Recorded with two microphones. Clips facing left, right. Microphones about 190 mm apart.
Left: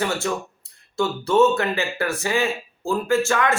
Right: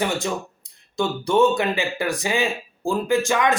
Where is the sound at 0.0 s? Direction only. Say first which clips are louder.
Even; 15° right (ahead or behind).